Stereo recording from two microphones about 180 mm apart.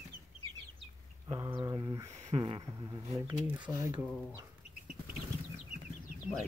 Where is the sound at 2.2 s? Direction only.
30° right (ahead or behind).